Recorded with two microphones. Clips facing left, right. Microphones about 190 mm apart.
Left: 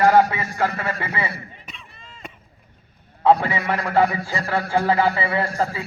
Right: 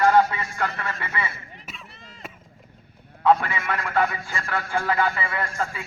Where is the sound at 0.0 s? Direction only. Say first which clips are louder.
Left 3 dB; 40° left (ahead or behind).